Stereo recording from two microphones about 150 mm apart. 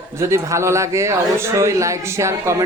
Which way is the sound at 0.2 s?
20° right (ahead or behind).